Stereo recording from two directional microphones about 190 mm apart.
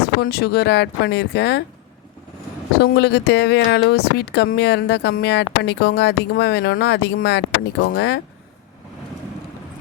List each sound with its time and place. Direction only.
0.0 s speech: 55° left (ahead or behind)
2.7 s speech: 60° left (ahead or behind)